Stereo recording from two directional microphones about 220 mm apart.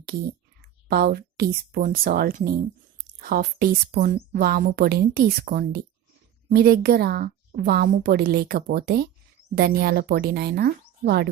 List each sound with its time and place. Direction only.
0.6 s speech: 45° right (ahead or behind)